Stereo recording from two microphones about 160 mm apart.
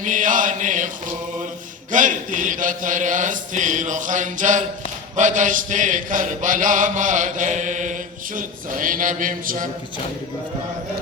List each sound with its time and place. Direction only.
0.0 s chant: 55° right (ahead or behind)
1.9 s chant: 55° right (ahead or behind)
8.4 s mantra: 55° right (ahead or behind)